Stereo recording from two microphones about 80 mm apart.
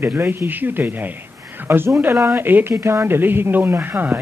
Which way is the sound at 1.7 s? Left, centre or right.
Right.